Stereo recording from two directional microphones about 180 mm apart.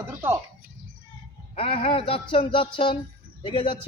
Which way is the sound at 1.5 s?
30° left (ahead or behind).